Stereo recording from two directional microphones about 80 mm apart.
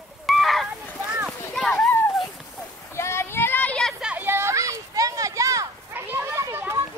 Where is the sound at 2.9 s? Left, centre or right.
Left.